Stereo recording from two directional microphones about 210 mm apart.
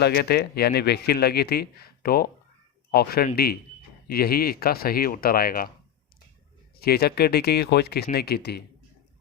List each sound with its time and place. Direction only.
0.0 s speech: 50° left (ahead or behind)
6.7 s speech: 50° left (ahead or behind)